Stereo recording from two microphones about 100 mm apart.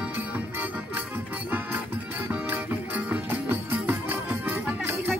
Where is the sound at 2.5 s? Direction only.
15° right (ahead or behind).